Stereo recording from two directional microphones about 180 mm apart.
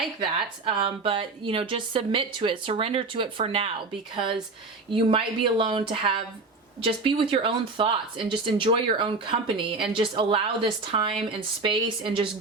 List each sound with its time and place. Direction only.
0.2 s speech: 30° right (ahead or behind)